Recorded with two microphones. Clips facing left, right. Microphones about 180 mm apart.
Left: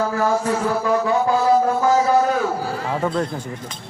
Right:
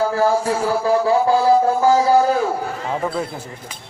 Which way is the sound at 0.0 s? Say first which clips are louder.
Right 2 dB; 30° right (ahead or behind).